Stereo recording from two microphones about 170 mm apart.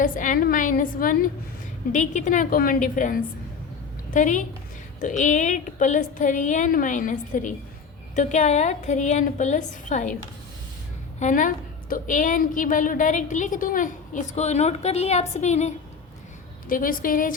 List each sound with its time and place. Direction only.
0.0 s a woman's voice: 50° left (ahead or behind)
11.2 s a woman's voice: 50° left (ahead or behind)
16.6 s a woman's voice: 55° left (ahead or behind)